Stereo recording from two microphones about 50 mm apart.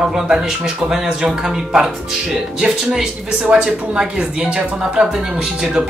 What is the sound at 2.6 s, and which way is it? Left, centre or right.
Speech, centre.